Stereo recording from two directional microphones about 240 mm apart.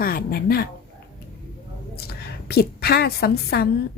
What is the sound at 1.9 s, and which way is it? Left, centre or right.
A woman's voice, left.